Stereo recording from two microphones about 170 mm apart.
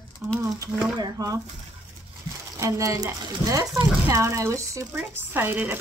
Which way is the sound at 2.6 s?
20° right (ahead or behind).